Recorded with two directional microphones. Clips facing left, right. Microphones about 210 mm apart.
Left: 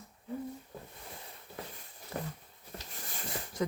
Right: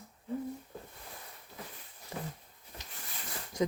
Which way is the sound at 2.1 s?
20° right (ahead or behind).